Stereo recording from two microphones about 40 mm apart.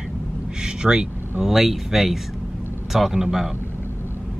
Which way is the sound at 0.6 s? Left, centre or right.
Centre.